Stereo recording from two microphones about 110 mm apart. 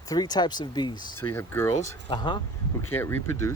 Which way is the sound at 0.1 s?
40° left (ahead or behind).